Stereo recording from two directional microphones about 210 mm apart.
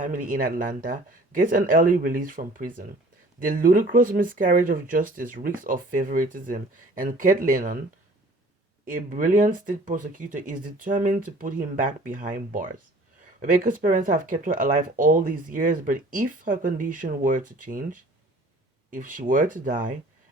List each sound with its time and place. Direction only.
0.0 s speech: 40° right (ahead or behind)
8.9 s speech: 40° right (ahead or behind)